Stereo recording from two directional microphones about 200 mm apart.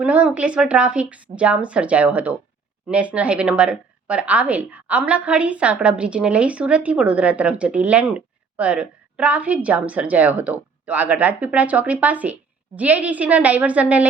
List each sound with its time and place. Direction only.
0.0 s a woman's voice: 5° right (ahead or behind)